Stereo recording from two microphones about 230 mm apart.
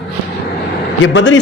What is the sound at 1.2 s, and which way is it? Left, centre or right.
Speech, left.